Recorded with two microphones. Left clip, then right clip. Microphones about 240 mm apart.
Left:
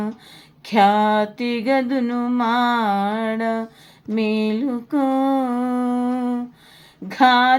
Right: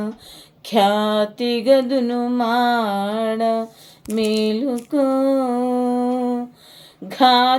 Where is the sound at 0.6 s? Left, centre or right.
Centre.